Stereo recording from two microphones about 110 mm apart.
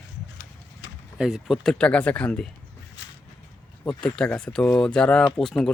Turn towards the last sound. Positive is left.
turn(degrees=5)  # may be behind; listen again after turning